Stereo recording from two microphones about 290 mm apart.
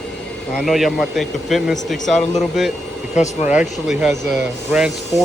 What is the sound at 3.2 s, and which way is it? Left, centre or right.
Speech, left.